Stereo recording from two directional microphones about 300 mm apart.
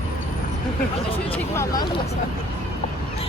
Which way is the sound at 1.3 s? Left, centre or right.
Centre.